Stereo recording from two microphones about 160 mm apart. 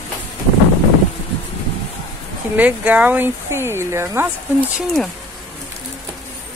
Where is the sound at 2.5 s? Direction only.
10° right (ahead or behind).